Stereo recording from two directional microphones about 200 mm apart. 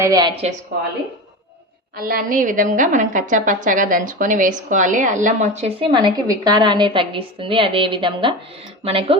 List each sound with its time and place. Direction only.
0.0 s a woman's voice: 20° right (ahead or behind)
2.0 s a woman's voice: 45° right (ahead or behind); by 9.1 s 30° right (ahead or behind)